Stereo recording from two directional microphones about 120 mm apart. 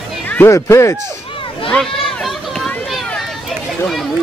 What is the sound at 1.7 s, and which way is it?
Run, centre (ahead or behind).